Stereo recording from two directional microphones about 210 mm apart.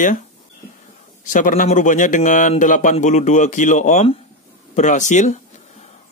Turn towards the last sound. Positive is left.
turn(degrees=35)  # may be behind; listen again after turning